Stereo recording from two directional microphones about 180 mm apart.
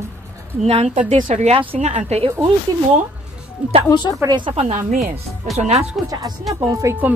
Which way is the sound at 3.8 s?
25° left (ahead or behind).